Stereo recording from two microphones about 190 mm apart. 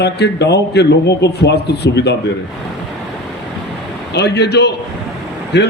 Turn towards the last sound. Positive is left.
turn(degrees=65)  # may be behind; listen again after turning